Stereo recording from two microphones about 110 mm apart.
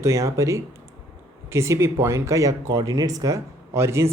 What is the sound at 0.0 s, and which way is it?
Speech, 25° right (ahead or behind).